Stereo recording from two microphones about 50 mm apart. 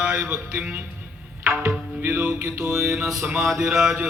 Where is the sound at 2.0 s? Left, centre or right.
Right.